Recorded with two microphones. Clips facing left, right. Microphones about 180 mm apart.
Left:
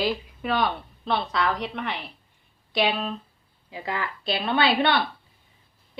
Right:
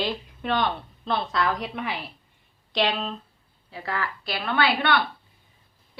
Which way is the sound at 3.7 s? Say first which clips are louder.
Even; 15° left (ahead or behind).